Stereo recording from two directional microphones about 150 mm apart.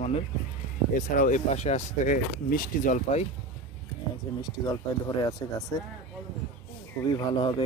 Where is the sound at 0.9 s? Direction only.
60° left (ahead or behind).